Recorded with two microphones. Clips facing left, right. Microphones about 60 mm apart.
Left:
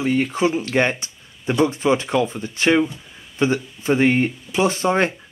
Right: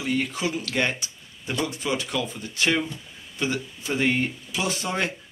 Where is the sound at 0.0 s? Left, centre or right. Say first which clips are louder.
Left 7 dB; left.